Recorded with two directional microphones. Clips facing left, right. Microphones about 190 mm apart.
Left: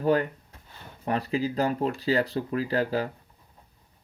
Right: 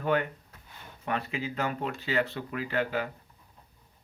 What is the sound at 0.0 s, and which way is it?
Speech, 35° left (ahead or behind).